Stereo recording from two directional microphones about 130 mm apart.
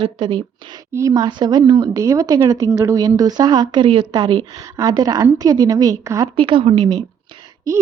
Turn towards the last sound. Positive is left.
turn(degrees=-25)  # may be behind; listen again after turning